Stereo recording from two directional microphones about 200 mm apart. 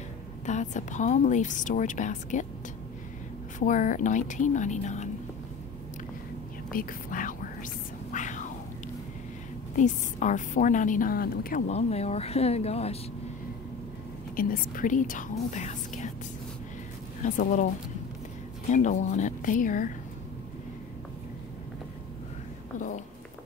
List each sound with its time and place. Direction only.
0.5 s a woman's voice: 35° left (ahead or behind)
3.5 s a woman's voice: 40° left (ahead or behind)
6.7 s speech: 45° left (ahead or behind)
8.1 s whispering: 40° left (ahead or behind)
9.8 s a woman's voice: 40° left (ahead or behind)
14.3 s a woman's voice: 45° left (ahead or behind)
17.2 s a woman's voice: 40° left (ahead or behind)
18.7 s a woman's voice: 35° left (ahead or behind)
22.8 s a sound: 40° left (ahead or behind)